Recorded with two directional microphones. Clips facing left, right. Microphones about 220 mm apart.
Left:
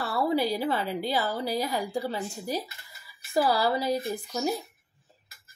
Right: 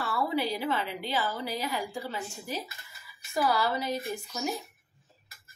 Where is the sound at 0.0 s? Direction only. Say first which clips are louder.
Left 4 dB; 35° left (ahead or behind).